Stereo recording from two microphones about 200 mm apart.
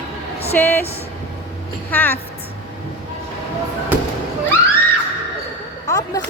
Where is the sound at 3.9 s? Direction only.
10° right (ahead or behind).